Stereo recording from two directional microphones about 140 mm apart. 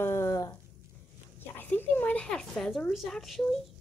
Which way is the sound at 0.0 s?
20° left (ahead or behind).